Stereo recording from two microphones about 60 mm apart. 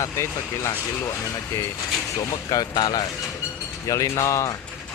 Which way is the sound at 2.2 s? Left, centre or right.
Left.